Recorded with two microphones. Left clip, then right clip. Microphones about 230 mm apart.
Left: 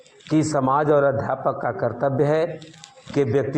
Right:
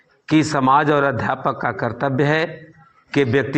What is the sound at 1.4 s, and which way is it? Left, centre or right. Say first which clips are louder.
A man's voice: right 2 dB; right.